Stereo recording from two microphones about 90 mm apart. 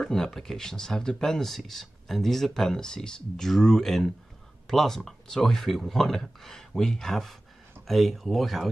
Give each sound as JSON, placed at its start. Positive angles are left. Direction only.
{"t": 0.0, "sound": "speech", "side_deg": 5}